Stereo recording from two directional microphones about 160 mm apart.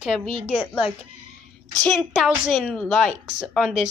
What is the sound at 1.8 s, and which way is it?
A woman's voice, 5° left (ahead or behind).